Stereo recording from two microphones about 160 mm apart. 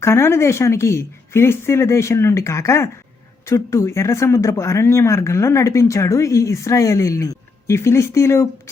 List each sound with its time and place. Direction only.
0.0 s speech: 15° left (ahead or behind)